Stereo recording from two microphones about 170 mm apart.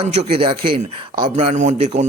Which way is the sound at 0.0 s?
35° right (ahead or behind).